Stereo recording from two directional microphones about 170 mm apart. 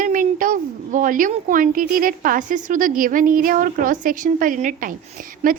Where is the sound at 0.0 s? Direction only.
50° right (ahead or behind).